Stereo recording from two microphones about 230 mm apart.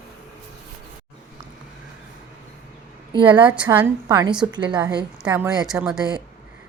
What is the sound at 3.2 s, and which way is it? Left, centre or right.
Speech, right.